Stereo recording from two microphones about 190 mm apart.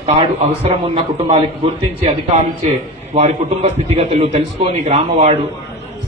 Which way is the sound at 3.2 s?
35° right (ahead or behind).